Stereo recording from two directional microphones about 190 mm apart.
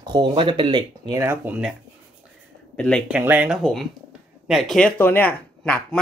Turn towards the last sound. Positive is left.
turn(degrees=5)  # may be behind; listen again after turning